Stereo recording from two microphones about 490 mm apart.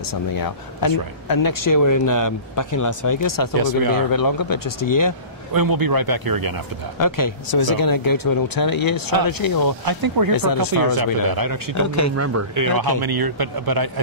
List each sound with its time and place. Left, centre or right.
0.1 s speech: left
3.5 s speech: right
4.1 s speech: left
5.5 s speech: right
7.0 s speech: left
9.8 s speech: right
10.3 s speech: left
11.0 s speech: right
11.7 s speech: left
12.2 s speech: right